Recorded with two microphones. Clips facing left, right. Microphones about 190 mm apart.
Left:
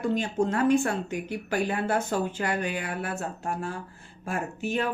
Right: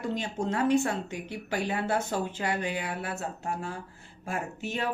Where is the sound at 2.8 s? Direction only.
50° left (ahead or behind).